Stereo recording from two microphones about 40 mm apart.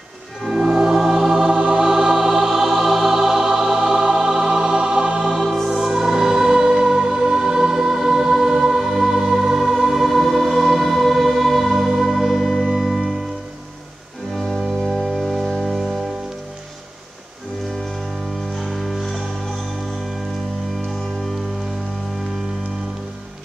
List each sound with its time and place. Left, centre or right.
0.5 s music: centre
5.7 s music: centre
14.3 s music: centre
14.8 s organ: centre
18.5 s music: centre